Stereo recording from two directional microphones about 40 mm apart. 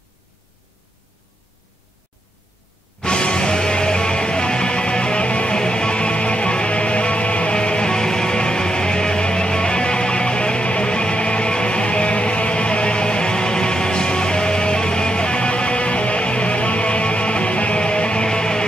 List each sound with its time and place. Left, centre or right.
3.0 s music: left